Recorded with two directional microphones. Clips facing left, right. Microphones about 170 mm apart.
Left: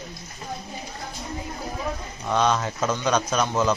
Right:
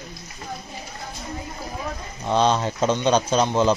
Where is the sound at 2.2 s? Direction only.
30° right (ahead or behind).